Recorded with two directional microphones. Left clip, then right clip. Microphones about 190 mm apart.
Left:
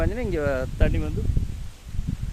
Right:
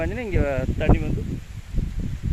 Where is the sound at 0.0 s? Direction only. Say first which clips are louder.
Even; 5° left (ahead or behind).